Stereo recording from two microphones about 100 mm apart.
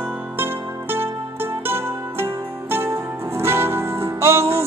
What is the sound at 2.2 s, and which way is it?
Music, 25° right (ahead or behind).